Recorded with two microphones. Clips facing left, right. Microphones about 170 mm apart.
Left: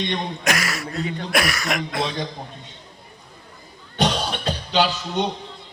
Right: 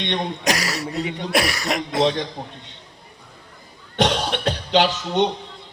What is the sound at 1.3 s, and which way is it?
Speech, 30° right (ahead or behind).